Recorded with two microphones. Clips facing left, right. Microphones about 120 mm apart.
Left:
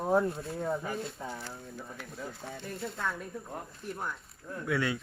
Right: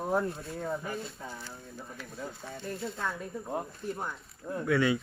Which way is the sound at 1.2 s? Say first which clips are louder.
Left 3 dB; 20° left (ahead or behind).